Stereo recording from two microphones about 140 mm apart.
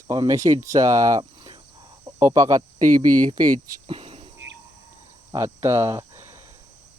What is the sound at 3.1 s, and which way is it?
Speech, 65° right (ahead or behind).